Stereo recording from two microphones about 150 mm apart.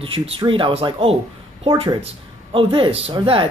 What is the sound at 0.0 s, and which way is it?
Speech, 35° right (ahead or behind).